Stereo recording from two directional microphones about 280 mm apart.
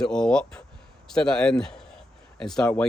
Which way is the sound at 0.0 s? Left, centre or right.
Centre.